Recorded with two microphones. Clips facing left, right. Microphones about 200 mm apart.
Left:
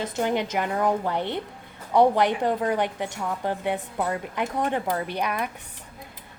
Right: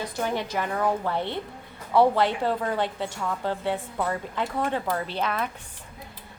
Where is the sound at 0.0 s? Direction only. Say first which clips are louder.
Left 3 dB; 20° left (ahead or behind).